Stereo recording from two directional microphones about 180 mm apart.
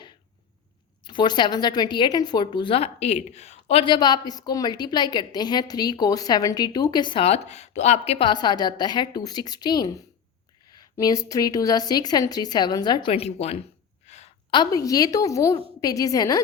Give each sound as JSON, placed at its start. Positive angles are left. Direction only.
{"t": 1.0, "sound": "a woman's voice", "side_deg": 25}
{"t": 14.1, "sound": "a sound", "side_deg": 40}
{"t": 14.5, "sound": "a woman's voice", "side_deg": 20}